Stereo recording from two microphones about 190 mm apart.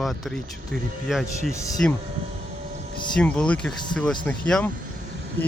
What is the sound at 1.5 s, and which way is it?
Speech, 15° left (ahead or behind).